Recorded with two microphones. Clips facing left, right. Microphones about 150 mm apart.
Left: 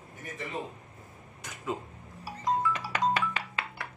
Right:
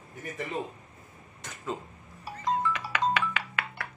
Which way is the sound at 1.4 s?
10° left (ahead or behind).